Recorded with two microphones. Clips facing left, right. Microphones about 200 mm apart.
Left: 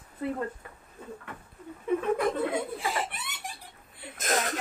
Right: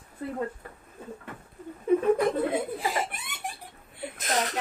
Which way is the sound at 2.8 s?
45° right (ahead or behind).